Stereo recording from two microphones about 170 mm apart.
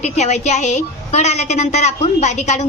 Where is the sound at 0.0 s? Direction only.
40° left (ahead or behind).